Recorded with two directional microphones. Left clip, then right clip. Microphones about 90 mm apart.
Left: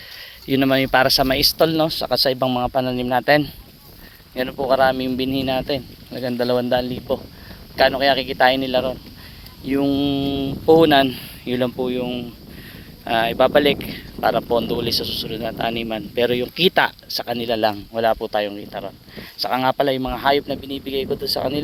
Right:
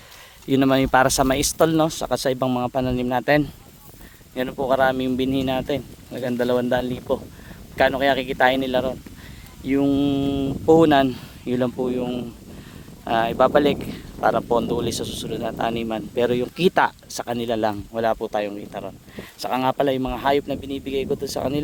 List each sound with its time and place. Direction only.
0.4 s speech: 50° right (ahead or behind)
1.1 s speech: 70° right (ahead or behind)
2.1 s a man's voice: 55° right (ahead or behind)
10.7 s speech: 40° right (ahead or behind)